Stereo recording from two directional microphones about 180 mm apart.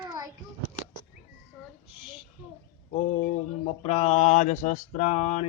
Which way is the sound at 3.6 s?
35° left (ahead or behind).